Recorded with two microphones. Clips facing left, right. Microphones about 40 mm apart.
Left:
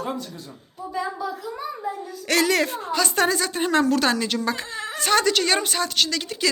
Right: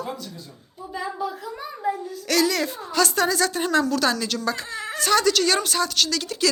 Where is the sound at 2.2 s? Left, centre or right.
Left.